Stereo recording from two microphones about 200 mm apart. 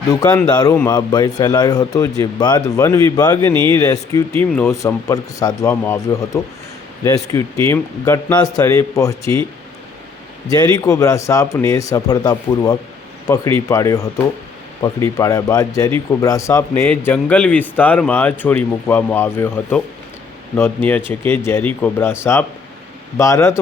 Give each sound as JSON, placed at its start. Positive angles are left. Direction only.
{"t": 0.1, "sound": "speech", "side_deg": 15}
{"t": 3.5, "sound": "speech", "side_deg": -25}
{"t": 3.8, "sound": "speech", "side_deg": 15}
{"t": 10.5, "sound": "speech", "side_deg": 20}